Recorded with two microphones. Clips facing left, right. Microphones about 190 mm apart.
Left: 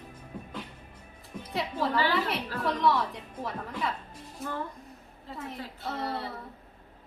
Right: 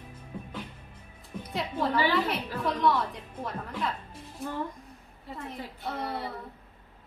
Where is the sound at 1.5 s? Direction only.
Centre (ahead or behind).